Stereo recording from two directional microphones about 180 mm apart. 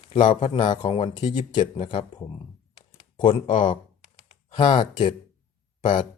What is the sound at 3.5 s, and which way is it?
Speech, 25° left (ahead or behind).